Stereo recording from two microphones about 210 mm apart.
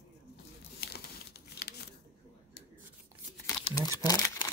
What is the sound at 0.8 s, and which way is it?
Crumpling, 50° left (ahead or behind).